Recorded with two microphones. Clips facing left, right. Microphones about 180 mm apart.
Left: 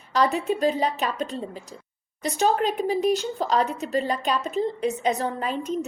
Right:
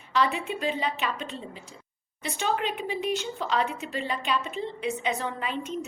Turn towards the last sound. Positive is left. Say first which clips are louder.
# left 5 dB
turn(degrees=40)  # may be behind; listen again after turning